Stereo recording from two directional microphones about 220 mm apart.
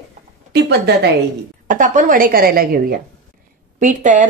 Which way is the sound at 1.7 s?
35° right (ahead or behind).